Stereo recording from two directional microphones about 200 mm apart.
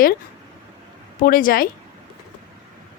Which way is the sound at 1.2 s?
45° left (ahead or behind).